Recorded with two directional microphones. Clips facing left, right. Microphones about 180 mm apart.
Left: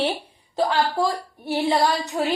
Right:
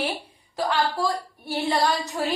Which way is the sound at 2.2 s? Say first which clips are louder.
Left 5 dB; 25° left (ahead or behind).